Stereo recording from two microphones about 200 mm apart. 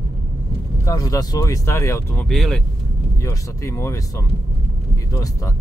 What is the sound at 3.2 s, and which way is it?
Speech, 15° left (ahead or behind).